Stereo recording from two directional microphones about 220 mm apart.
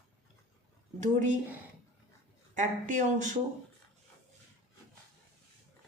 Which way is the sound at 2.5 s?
35° right (ahead or behind).